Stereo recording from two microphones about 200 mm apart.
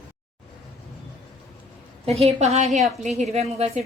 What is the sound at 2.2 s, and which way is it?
A woman's voice, 30° right (ahead or behind).